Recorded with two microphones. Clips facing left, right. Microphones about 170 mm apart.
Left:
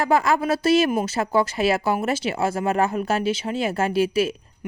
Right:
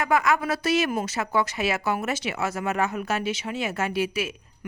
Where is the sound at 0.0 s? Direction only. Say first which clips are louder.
Left 3 dB; 30° left (ahead or behind).